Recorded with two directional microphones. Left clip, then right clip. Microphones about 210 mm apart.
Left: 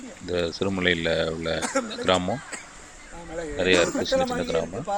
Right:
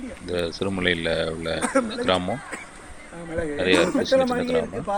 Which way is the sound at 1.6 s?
35° right (ahead or behind).